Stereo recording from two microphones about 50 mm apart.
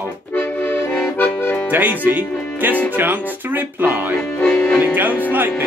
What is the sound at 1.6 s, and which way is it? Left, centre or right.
Speech, right.